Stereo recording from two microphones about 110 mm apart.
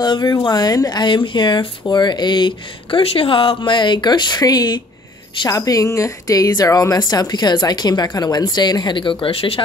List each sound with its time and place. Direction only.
0.0 s a woman's voice: 40° left (ahead or behind); by 9.6 s 60° left (ahead or behind)